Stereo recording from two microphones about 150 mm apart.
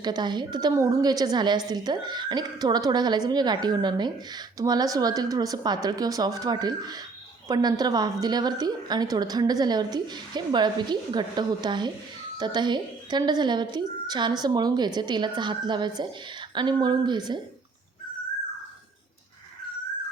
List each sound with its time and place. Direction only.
0.0 s a woman's voice: 30° right (ahead or behind)